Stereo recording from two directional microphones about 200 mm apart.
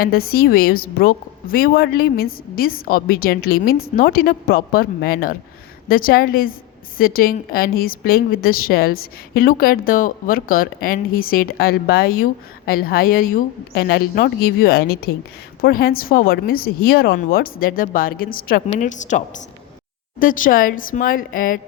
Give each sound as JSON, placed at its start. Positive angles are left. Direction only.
{"t": 0.0, "sound": "a woman's voice", "side_deg": 50}